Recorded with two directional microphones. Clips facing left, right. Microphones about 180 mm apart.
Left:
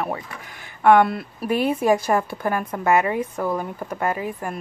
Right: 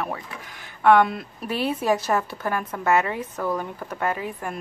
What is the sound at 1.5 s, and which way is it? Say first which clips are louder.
Speech: left 5 dB; 50° left (ahead or behind).